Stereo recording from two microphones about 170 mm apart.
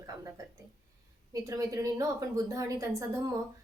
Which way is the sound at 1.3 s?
20° right (ahead or behind).